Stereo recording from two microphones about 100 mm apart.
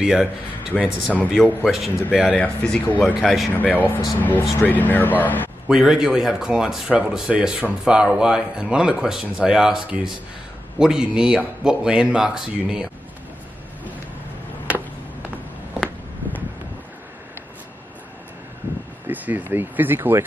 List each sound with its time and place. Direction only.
0.0 s a man's voice: 5° right (ahead or behind)
2.3 s speech: 10° left (ahead or behind)
3.2 s a man's voice: centre (ahead or behind)
3.5 s speech: 15° left (ahead or behind)
5.7 s speech: 5° right (ahead or behind)
19.0 s speech: 20° right (ahead or behind)